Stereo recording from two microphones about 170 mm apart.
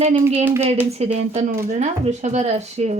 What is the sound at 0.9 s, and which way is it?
Speech, 40° right (ahead or behind).